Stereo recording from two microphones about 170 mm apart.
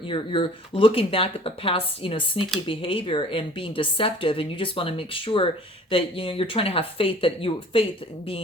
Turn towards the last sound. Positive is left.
turn(degrees=30)  # may be behind; listen again after turning